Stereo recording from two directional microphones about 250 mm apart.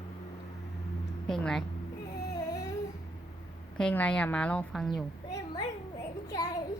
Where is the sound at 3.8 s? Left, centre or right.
Centre.